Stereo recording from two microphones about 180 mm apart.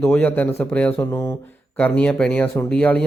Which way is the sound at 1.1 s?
20° left (ahead or behind).